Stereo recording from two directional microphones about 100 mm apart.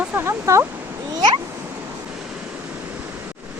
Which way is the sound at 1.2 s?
45° right (ahead or behind).